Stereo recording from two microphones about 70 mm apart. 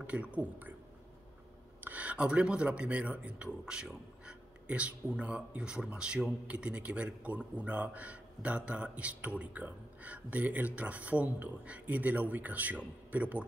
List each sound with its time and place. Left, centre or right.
0.0 s speech: centre
1.8 s speech: right